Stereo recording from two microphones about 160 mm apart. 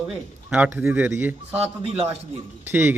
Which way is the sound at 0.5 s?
10° right (ahead or behind).